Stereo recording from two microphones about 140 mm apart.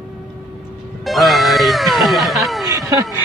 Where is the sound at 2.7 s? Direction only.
25° right (ahead or behind).